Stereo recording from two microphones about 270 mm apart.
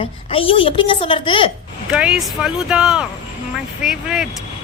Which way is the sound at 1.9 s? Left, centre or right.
Centre.